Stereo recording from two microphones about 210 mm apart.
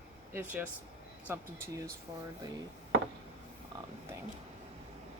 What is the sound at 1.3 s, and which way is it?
Speech, 10° right (ahead or behind).